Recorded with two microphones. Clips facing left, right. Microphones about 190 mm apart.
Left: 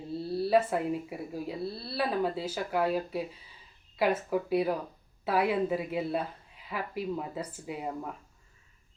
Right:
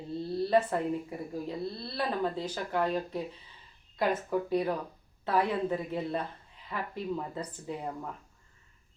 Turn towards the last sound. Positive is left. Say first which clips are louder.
# left 1 dB
turn(degrees=10)  # may be behind; listen again after turning